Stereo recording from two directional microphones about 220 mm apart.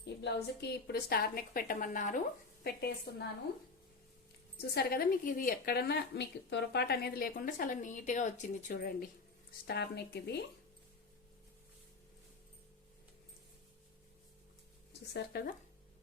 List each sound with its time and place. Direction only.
0.0 s speech: 50° left (ahead or behind)
2.6 s speech: 45° left (ahead or behind)
4.7 s speech: 45° left (ahead or behind)
15.1 s speech: 45° left (ahead or behind)